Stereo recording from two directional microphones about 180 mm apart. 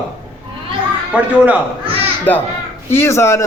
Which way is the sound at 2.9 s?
15° left (ahead or behind).